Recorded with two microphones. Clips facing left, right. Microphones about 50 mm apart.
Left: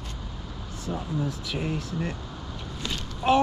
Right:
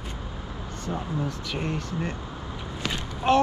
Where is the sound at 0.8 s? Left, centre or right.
Centre.